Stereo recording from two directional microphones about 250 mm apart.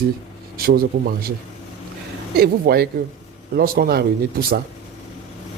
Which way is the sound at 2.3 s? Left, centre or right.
Right.